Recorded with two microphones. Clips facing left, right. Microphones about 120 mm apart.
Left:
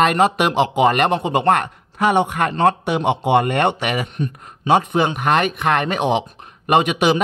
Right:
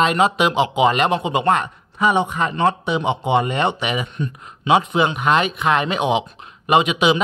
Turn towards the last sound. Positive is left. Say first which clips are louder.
# even
turn(degrees=50)  # may be behind; listen again after turning